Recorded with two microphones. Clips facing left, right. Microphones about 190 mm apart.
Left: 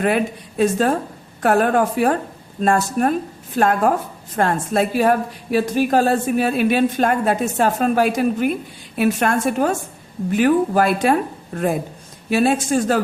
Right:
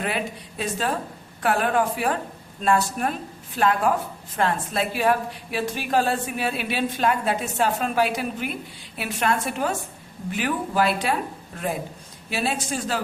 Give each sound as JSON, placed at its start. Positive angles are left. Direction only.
{"t": 0.0, "sound": "a woman's voice", "side_deg": 50}